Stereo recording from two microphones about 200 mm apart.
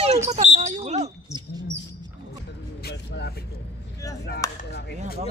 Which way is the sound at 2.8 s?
55° left (ahead or behind).